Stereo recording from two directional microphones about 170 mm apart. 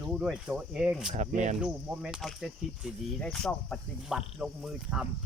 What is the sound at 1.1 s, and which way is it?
Speech, 45° right (ahead or behind).